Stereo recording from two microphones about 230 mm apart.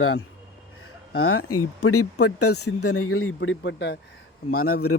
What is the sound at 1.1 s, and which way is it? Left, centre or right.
Speech, left.